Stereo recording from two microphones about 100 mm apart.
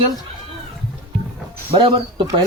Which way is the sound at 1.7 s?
55° right (ahead or behind).